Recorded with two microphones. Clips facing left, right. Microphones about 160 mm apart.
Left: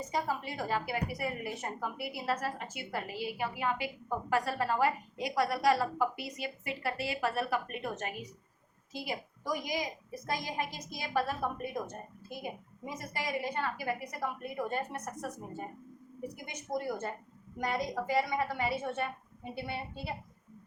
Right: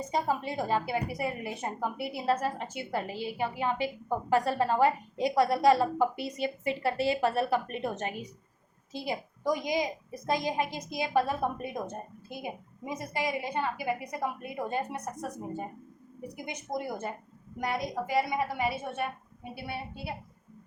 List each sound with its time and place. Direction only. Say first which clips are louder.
0.1 s a woman's voice: right 5 dB; 20° right (ahead or behind)